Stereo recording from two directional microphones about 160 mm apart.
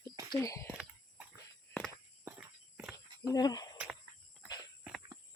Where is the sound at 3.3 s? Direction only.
25° left (ahead or behind).